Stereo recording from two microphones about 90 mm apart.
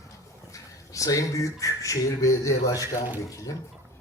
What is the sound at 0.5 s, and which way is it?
Speech, 40° left (ahead or behind).